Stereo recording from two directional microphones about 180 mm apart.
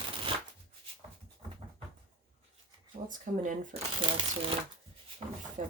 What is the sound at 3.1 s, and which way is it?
Speech, 45° right (ahead or behind).